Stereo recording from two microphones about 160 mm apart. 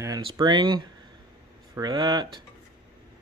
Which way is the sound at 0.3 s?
30° right (ahead or behind).